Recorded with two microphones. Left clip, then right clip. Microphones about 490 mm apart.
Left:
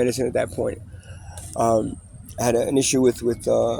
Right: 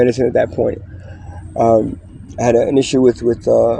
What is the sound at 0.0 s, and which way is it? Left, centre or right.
Speech, left.